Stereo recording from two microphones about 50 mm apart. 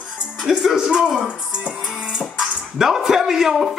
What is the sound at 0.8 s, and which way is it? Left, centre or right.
Speech, centre.